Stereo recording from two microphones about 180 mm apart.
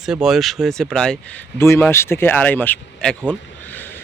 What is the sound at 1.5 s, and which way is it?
Speech, 15° left (ahead or behind).